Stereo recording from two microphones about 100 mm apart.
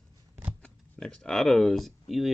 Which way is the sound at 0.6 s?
10° left (ahead or behind).